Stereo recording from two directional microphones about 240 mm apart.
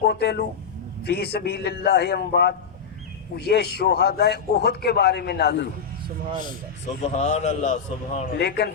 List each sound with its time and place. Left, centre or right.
0.0 s a man's voice: left
6.8 s a man's voice: left
8.4 s a man's voice: left